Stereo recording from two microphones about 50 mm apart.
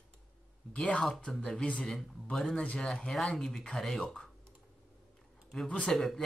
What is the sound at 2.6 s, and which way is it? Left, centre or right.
Speech, centre.